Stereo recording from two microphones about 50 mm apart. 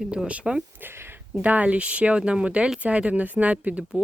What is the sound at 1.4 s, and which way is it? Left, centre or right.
Speech, right.